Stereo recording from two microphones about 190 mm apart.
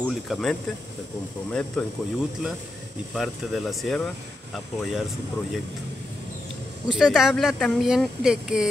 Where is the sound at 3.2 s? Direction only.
Centre (ahead or behind).